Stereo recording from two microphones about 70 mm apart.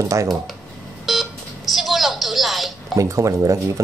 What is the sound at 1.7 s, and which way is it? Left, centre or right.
Television, centre.